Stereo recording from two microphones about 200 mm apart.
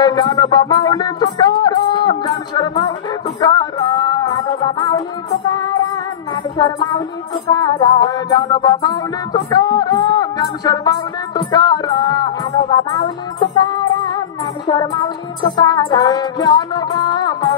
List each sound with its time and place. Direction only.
0.0 s music: 20° left (ahead or behind)
6.3 s music: 15° left (ahead or behind)
13.7 s music: 20° left (ahead or behind)